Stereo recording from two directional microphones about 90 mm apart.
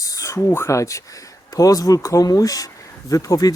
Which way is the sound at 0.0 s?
40° left (ahead or behind).